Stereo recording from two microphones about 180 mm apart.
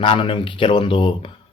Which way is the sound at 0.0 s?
30° left (ahead or behind).